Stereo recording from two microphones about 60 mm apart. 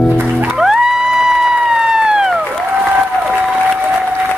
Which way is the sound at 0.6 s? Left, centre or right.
Centre.